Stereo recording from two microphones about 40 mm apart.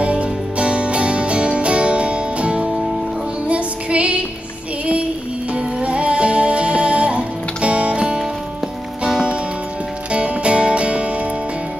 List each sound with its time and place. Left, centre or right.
0.0 s music: right
5.5 s music: right
10.1 s music: right